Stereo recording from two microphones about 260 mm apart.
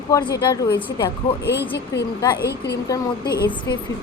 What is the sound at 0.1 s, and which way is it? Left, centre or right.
Speech, centre.